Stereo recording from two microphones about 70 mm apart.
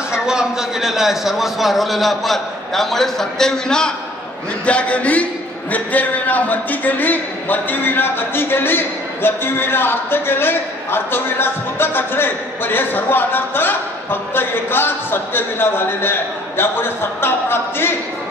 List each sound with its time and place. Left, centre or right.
0.1 s a man's voice: centre; by 17.9 s left